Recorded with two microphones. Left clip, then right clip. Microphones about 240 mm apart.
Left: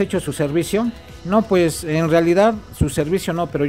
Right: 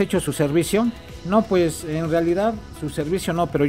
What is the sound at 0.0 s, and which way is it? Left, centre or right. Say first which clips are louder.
A man's voice: left 1 dB; centre.